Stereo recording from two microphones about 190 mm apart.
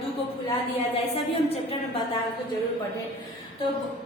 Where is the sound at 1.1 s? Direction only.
30° left (ahead or behind).